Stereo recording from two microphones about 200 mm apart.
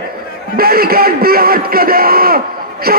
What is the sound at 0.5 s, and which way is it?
Speech, 50° right (ahead or behind).